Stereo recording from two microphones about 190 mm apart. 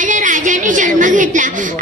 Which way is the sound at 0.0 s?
40° right (ahead or behind).